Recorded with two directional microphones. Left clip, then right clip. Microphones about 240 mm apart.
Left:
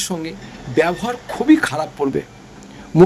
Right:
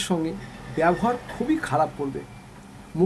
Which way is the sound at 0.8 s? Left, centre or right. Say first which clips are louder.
Even; centre.